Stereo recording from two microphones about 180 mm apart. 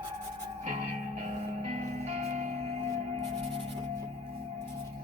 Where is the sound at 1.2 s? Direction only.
40° right (ahead or behind).